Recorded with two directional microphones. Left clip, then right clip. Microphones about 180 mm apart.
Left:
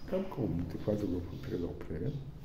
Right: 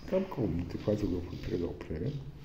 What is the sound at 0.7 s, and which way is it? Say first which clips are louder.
A man's voice: right 2 dB; 20° right (ahead or behind).